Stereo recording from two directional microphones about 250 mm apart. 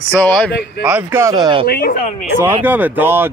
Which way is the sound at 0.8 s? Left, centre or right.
Centre.